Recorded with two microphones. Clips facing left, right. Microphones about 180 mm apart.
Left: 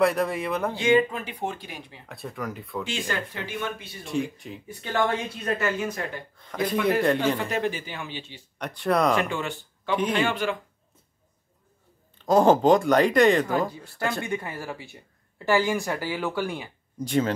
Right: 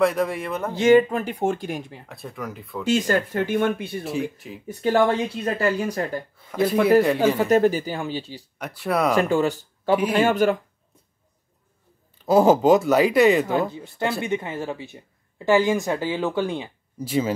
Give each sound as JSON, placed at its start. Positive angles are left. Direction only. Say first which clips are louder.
{"t": 0.0, "sound": "speech", "louder": "right 2 dB", "side_deg": 0}
{"t": 0.7, "sound": "speech", "louder": "right 7 dB", "side_deg": -45}
{"t": 2.0, "sound": "speech", "louder": "even", "side_deg": 0}
{"t": 2.8, "sound": "speech", "louder": "right 10 dB", "side_deg": -40}
{"t": 4.0, "sound": "speech", "louder": "right 2 dB", "side_deg": -5}
{"t": 4.6, "sound": "speech", "louder": "right 7 dB", "side_deg": -35}
{"t": 6.3, "sound": "speech", "louder": "right 5 dB", "side_deg": -5}
{"t": 7.3, "sound": "speech", "louder": "right 9 dB", "side_deg": -45}
{"t": 8.5, "sound": "speech", "louder": "even", "side_deg": -5}
{"t": 9.1, "sound": "speech", "louder": "right 6 dB", "side_deg": -40}
{"t": 12.3, "sound": "speech", "louder": "right 2 dB", "side_deg": -5}
{"t": 13.7, "sound": "speech", "louder": "right 3 dB", "side_deg": -20}
{"t": 17.0, "sound": "speech", "louder": "right 1 dB", "side_deg": -5}